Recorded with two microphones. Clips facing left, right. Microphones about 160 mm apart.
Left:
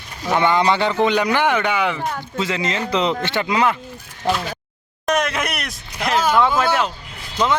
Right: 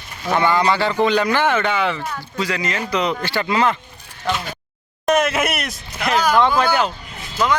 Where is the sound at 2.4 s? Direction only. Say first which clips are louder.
Even; 25° left (ahead or behind).